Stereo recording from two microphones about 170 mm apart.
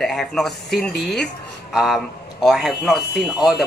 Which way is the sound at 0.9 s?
75° left (ahead or behind).